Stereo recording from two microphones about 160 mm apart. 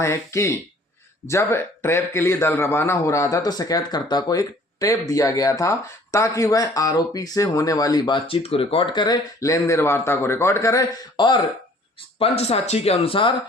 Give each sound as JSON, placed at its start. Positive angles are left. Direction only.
{"t": 0.0, "sound": "a man's voice", "side_deg": 15}
{"t": 12.4, "sound": "speech", "side_deg": 40}